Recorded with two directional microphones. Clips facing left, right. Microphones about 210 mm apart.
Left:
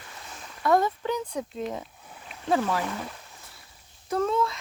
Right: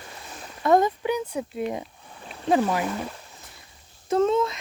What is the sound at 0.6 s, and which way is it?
Speech, 20° right (ahead or behind).